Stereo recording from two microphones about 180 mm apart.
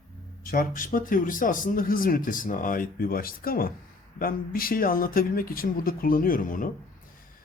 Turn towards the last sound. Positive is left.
turn(degrees=50)  # may be behind; listen again after turning